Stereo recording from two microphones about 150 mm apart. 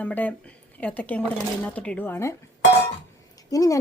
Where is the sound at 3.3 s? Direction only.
20° left (ahead or behind).